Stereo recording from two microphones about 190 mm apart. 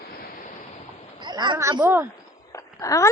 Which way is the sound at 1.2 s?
25° right (ahead or behind).